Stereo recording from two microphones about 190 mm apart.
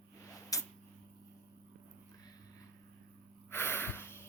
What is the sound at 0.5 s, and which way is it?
Tick-tock, 15° left (ahead or behind).